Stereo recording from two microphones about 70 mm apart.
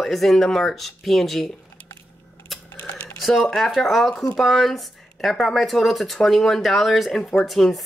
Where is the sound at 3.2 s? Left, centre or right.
Centre.